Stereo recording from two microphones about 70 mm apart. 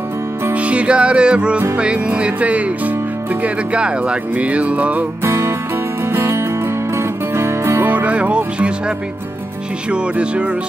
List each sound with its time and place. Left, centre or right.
0.6 s music: centre
1.8 s speech: centre
5.2 s music: right
7.9 s music: centre